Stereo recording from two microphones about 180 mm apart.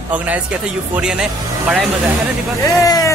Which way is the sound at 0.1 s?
10° right (ahead or behind).